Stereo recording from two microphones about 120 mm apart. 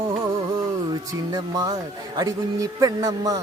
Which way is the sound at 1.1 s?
30° right (ahead or behind).